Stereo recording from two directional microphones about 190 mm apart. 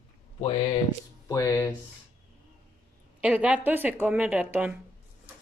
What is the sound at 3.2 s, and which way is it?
A woman's voice, 5° right (ahead or behind).